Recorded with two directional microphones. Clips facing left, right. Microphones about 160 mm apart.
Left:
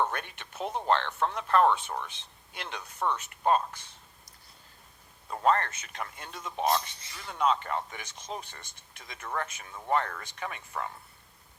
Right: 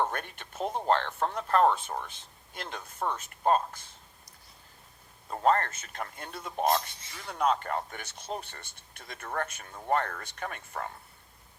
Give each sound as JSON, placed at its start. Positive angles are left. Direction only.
{"t": 0.1, "sound": "speech", "side_deg": -45}
{"t": 0.6, "sound": "speech", "side_deg": -5}
{"t": 0.9, "sound": "speech", "side_deg": -40}
{"t": 5.3, "sound": "speech", "side_deg": -35}